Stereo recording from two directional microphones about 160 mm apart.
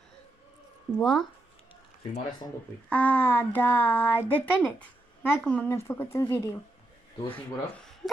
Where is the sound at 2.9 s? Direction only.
10° left (ahead or behind).